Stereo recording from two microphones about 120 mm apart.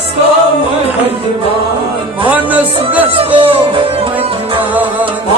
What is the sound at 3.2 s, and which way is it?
Music, 50° right (ahead or behind).